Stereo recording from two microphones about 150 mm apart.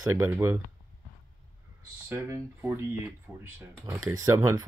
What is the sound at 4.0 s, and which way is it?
Speech, 25° right (ahead or behind).